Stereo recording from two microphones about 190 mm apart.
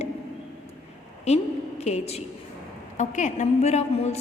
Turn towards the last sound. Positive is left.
turn(degrees=35)  # may be behind; listen again after turning